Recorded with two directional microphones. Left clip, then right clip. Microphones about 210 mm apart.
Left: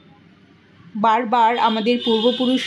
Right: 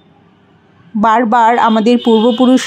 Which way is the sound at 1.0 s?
35° right (ahead or behind).